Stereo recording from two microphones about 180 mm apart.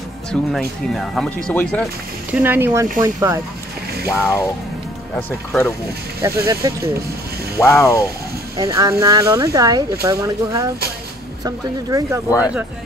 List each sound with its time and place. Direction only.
0.3 s speech: centre (ahead or behind)
2.3 s speech: 10° right (ahead or behind)
4.1 s speech: 15° left (ahead or behind)
6.2 s speech: 15° right (ahead or behind)
7.5 s speech: 15° left (ahead or behind)
8.5 s speech: 20° right (ahead or behind)
12.3 s speech: 20° left (ahead or behind)